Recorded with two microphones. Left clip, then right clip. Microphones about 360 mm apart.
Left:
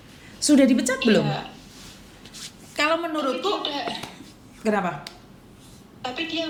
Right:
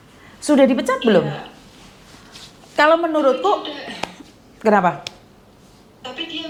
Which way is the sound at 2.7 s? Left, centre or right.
Right.